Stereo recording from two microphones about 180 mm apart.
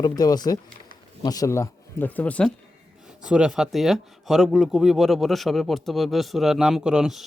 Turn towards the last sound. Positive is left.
turn(degrees=0)  # may be behind; listen again after turning